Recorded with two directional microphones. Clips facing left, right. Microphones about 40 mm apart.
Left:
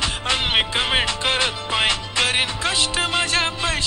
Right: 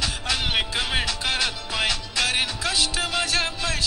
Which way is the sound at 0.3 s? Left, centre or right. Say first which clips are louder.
Left 5 dB; left.